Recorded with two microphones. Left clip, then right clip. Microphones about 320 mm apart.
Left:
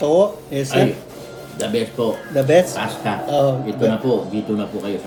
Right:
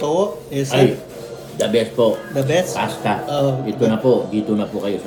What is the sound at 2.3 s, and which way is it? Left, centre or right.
Speech, left.